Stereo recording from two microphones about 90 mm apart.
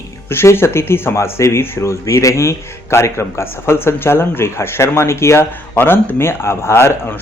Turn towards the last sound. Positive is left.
turn(degrees=30)  # may be behind; listen again after turning